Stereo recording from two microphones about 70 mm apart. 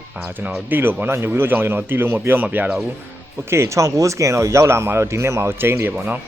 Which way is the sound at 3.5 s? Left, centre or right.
Right.